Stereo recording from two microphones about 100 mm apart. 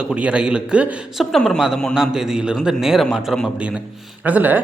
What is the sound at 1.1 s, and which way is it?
A man's voice, 5° left (ahead or behind).